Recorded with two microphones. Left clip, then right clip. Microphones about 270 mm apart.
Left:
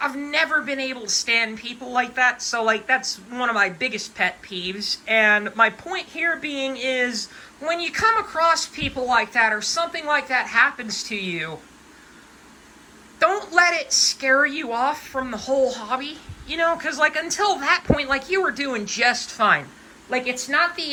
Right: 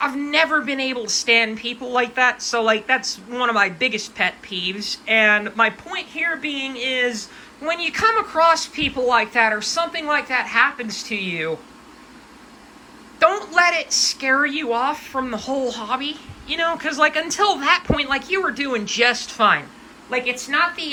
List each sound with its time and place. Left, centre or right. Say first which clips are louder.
0.0 s a woman's voice: right 3 dB; centre
13.1 s a sound: right 2 dB; centre
13.9 s a woman's voice: even; centre